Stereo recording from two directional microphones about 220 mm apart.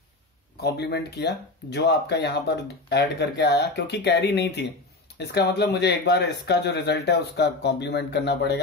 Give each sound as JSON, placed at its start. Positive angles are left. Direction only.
{"t": 0.6, "sound": "speech", "side_deg": 45}